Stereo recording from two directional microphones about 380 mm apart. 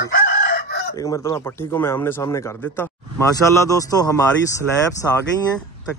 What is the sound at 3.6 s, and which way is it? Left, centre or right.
Speech, centre.